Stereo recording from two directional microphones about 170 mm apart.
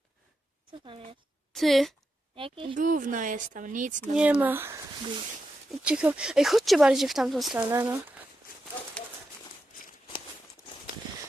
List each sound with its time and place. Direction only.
0.7 s speech: 30° right (ahead or behind)
1.5 s speech: centre (ahead or behind)
2.3 s speech: 30° right (ahead or behind)
2.7 s speech: 50° right (ahead or behind)
4.1 s speech: 10° right (ahead or behind)
5.8 s speech: 5° right (ahead or behind)
7.7 s speech: 15° right (ahead or behind)
9.0 s a sound: 5° left (ahead or behind)